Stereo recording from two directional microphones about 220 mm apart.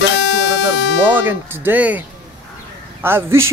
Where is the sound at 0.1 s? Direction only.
55° left (ahead or behind).